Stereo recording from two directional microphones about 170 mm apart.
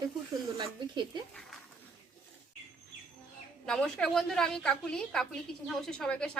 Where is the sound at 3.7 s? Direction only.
5° left (ahead or behind).